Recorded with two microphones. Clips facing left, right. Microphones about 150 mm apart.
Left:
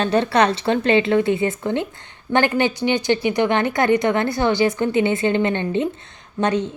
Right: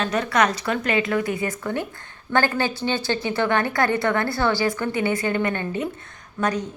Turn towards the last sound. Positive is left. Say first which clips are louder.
# left 4 dB
turn(degrees=25)  # may be behind; listen again after turning